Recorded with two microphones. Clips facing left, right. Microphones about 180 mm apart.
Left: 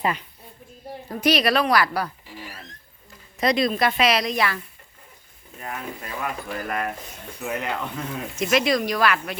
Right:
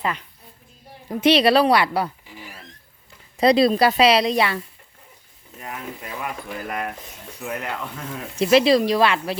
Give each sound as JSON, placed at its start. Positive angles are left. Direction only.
{"t": 0.0, "sound": "speech", "side_deg": 5}
{"t": 1.2, "sound": "speech", "side_deg": -30}
{"t": 3.3, "sound": "speech", "side_deg": -30}
{"t": 5.5, "sound": "speech", "side_deg": -10}
{"t": 7.4, "sound": "speech", "side_deg": 0}
{"t": 8.4, "sound": "speech", "side_deg": -30}